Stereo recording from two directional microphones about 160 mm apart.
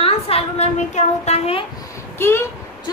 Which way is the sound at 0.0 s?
35° left (ahead or behind).